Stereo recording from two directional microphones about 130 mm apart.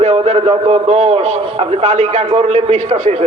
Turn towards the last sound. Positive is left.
turn(degrees=-60)  # may be behind; listen again after turning